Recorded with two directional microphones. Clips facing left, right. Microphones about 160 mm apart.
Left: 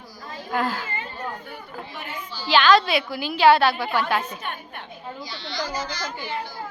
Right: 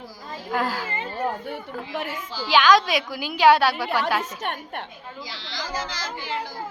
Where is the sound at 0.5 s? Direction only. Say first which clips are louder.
Even; 5° right (ahead or behind).